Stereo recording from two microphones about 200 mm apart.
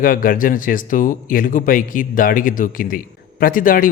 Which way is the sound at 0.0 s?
45° left (ahead or behind).